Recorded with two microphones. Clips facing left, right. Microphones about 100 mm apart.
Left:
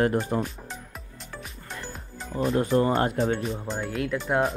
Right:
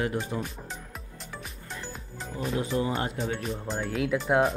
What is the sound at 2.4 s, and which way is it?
Music, 45° left (ahead or behind).